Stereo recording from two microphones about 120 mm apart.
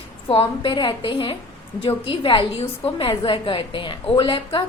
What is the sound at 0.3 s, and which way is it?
A woman's voice, 45° left (ahead or behind).